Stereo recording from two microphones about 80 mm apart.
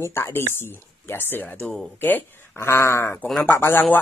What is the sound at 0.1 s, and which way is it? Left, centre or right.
Speech, left.